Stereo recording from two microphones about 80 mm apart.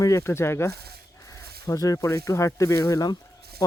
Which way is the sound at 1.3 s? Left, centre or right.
Left.